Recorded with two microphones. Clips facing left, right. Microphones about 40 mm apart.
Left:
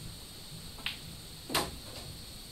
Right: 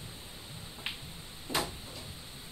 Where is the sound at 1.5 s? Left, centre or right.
Right.